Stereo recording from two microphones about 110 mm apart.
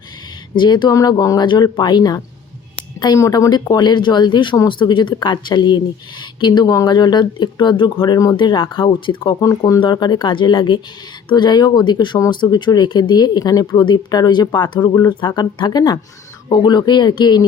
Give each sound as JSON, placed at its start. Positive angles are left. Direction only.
{"t": 0.5, "sound": "speech", "side_deg": 45}
{"t": 8.4, "sound": "speech", "side_deg": 50}